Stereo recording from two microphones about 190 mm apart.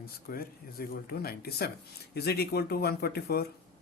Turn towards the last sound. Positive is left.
turn(degrees=55)  # may be behind; listen again after turning